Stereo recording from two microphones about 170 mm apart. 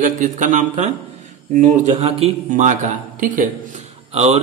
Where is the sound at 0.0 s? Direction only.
50° right (ahead or behind).